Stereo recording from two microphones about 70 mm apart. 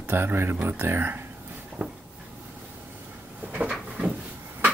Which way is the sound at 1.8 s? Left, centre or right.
Right.